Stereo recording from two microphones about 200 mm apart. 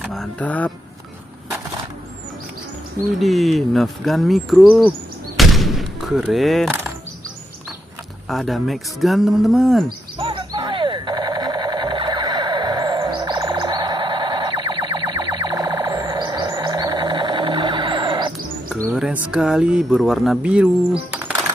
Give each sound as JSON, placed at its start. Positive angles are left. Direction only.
{"t": 0.0, "sound": "speech", "side_deg": 0}
{"t": 3.2, "sound": "speech", "side_deg": 0}
{"t": 5.4, "sound": "gunshot", "side_deg": 0}
{"t": 8.3, "sound": "speech", "side_deg": 0}
{"t": 10.1, "sound": "a sound", "side_deg": -25}
{"t": 18.9, "sound": "speech", "side_deg": -5}
{"t": 21.1, "sound": "music", "side_deg": -10}